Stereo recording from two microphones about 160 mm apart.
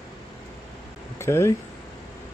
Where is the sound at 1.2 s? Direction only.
15° left (ahead or behind).